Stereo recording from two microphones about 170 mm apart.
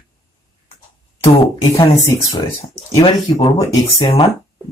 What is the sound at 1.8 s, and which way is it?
Speech, 30° left (ahead or behind).